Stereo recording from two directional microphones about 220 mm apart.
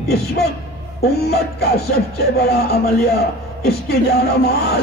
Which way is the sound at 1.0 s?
45° left (ahead or behind).